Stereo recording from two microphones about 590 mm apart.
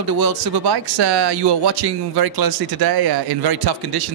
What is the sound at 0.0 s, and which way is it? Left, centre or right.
Speech, right.